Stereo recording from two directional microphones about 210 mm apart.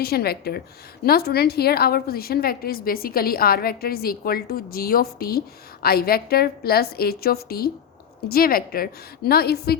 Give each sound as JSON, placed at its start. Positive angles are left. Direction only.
{"t": 0.0, "sound": "a woman's voice", "side_deg": 50}